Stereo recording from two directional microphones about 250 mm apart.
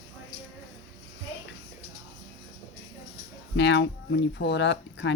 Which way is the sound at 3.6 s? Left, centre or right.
Left.